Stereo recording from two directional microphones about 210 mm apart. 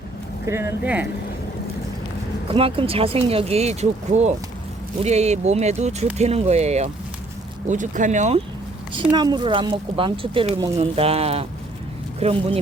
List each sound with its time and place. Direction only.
0.4 s speech: 10° right (ahead or behind)
2.5 s speech: 25° right (ahead or behind)
9.1 s speech: 20° right (ahead or behind)